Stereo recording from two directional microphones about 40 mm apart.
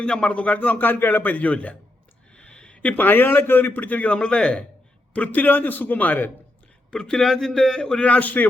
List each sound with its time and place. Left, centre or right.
0.0 s a man's voice: left
2.3 s a sound: left
2.9 s a man's voice: left
4.2 s a man's voice: left
5.1 s a man's voice: left
7.1 s speech: centre
8.0 s a man's voice: left